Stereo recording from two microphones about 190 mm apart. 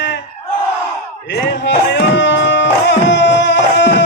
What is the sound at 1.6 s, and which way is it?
Music, 65° left (ahead or behind).